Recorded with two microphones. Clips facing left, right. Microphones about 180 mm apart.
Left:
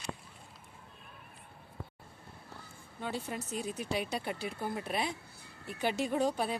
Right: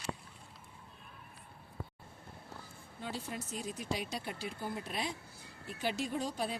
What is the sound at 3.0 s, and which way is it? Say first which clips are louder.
Speech: left 4 dB; 60° left (ahead or behind).